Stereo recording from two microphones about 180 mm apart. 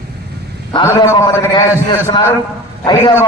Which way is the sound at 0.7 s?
25° left (ahead or behind).